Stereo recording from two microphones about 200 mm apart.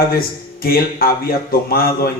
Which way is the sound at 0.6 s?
50° left (ahead or behind).